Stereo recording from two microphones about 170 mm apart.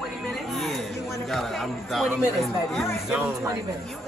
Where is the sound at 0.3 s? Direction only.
Centre (ahead or behind).